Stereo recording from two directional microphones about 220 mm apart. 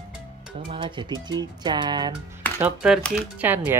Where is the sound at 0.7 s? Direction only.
20° right (ahead or behind).